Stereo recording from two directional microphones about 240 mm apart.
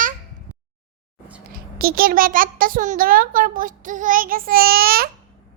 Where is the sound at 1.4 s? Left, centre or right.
Right.